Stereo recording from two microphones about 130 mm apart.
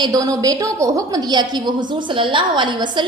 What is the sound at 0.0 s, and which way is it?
A woman's voice, 25° right (ahead or behind).